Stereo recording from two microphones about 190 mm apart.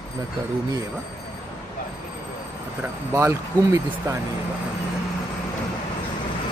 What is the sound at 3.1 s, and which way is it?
Speech, 15° right (ahead or behind).